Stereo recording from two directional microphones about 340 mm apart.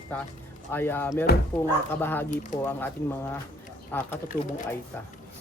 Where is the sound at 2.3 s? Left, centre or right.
Left.